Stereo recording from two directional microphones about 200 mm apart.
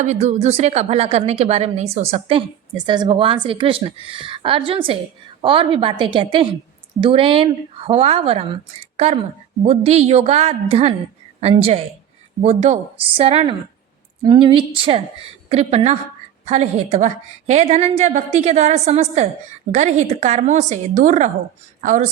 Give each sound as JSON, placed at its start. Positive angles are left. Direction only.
{"t": 0.0, "sound": "a woman's voice", "side_deg": -35}
{"t": 9.6, "sound": "a woman's voice", "side_deg": -30}